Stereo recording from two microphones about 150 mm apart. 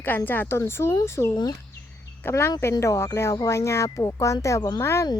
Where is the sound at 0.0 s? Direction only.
15° left (ahead or behind).